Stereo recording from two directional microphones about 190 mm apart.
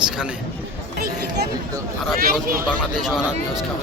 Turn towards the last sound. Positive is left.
turn(degrees=0)  # may be behind; listen again after turning